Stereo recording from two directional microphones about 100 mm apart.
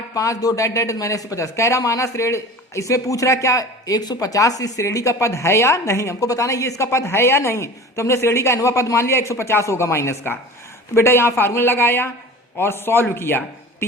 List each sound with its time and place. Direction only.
0.1 s a man's voice: 35° left (ahead or behind)